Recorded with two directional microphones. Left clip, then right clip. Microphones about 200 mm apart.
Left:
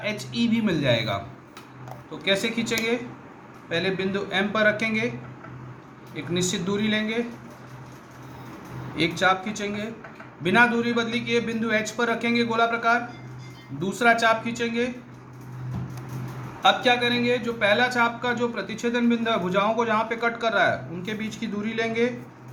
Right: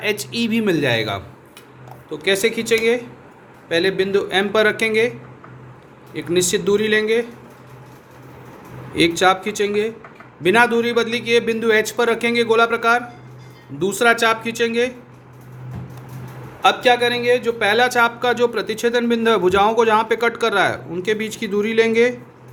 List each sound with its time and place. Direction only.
0.0 s speech: 50° right (ahead or behind)
2.2 s speech: 50° right (ahead or behind)
6.1 s speech: 50° right (ahead or behind)
9.0 s speech: 55° right (ahead or behind)
16.6 s speech: 50° right (ahead or behind)